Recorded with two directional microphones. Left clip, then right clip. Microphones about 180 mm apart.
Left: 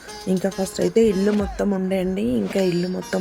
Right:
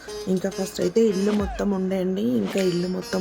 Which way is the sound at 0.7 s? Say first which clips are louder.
Left 2 dB; 15° left (ahead or behind).